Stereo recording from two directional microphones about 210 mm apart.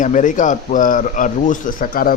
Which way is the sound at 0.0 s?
35° left (ahead or behind).